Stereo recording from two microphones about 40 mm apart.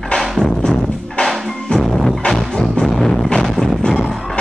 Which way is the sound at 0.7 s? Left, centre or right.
Centre.